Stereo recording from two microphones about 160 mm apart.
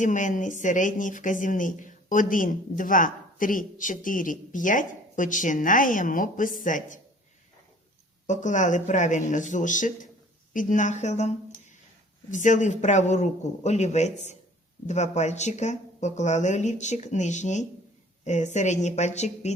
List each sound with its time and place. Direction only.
0.0 s speech: 50° left (ahead or behind)
8.3 s speech: 50° left (ahead or behind)